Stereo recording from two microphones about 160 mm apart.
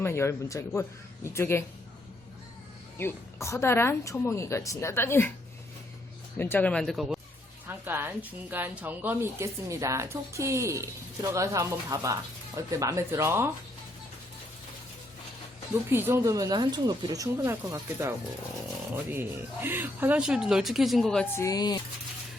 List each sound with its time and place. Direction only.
0.0 s speech: 15° left (ahead or behind)
3.0 s speech: 15° left (ahead or behind)
6.4 s speech: 10° left (ahead or behind)
7.7 s a woman's voice: 15° right (ahead or behind)
15.9 s speech: 15° right (ahead or behind)
19.1 s speech: 15° right (ahead or behind); by 21.2 s 5° left (ahead or behind)
21.3 s speech: 20° left (ahead or behind)